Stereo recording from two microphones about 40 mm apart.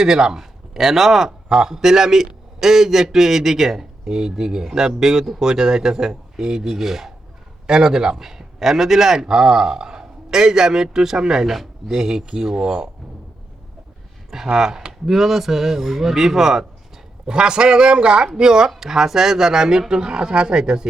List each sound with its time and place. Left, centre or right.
0.0 s a man's voice: centre
14.5 s a man's voice: centre
17.2 s a man's voice: right